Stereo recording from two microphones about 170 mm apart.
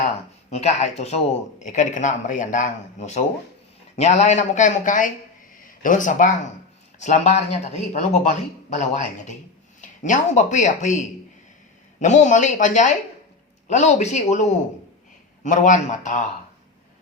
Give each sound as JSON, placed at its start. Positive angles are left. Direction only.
{"t": 0.5, "sound": "speech", "side_deg": 40}
{"t": 15.4, "sound": "speech", "side_deg": 45}